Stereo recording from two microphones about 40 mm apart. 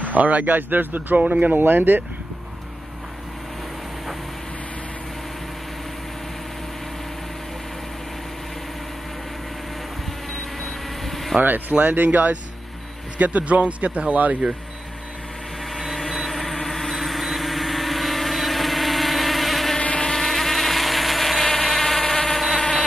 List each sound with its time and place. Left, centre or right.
0.0 s speech: right
0.6 s speech: right
1.1 s speech: right
1.6 s speech: right
10.3 s vehicle: centre
11.8 s a man's voice: right
15.7 s vehicle: centre
20.0 s mosquito: centre